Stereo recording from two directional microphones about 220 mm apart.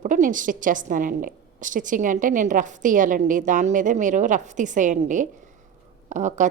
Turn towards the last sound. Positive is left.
turn(degrees=-35)  # may be behind; listen again after turning